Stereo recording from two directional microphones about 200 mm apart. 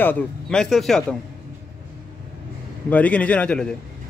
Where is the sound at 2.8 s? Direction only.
5° left (ahead or behind).